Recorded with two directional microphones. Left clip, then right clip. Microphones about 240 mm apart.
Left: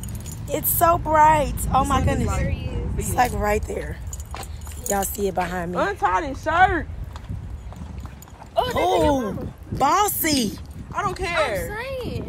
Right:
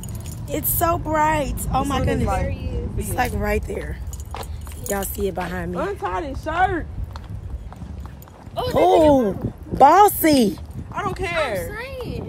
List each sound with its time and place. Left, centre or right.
0.5 s speech: centre
5.8 s speech: left
8.7 s speech: right
10.9 s speech: centre
11.7 s speech: centre